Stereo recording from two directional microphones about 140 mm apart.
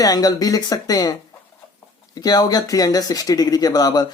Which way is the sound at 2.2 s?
30° left (ahead or behind).